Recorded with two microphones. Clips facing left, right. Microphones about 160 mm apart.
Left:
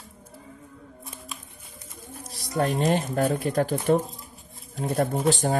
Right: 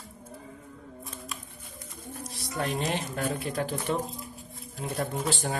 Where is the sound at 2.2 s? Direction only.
40° left (ahead or behind).